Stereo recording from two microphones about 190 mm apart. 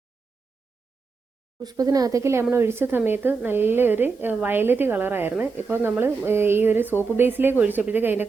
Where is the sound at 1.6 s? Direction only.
20° right (ahead or behind).